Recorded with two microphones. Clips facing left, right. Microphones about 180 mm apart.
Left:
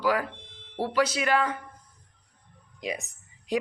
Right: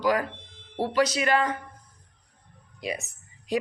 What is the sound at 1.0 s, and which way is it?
Speech, 10° left (ahead or behind).